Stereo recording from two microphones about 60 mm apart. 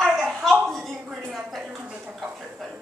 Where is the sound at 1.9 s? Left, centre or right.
Centre.